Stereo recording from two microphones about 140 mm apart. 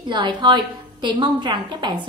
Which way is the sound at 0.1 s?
30° right (ahead or behind).